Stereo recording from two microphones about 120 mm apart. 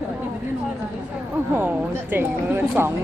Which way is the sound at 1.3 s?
15° right (ahead or behind).